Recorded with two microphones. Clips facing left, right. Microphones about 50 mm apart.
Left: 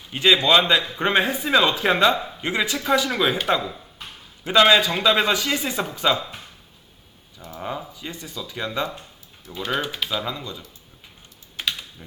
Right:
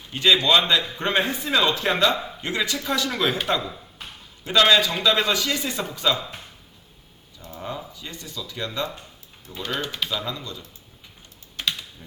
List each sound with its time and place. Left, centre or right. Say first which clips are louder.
0.1 s a man's voice: left 1 dB; centre
7.3 s a man's voice: left 3 dB; left
11.5 s typing: even; centre